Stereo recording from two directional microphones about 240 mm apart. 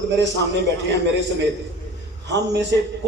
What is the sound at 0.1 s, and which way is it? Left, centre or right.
A man's voice, right.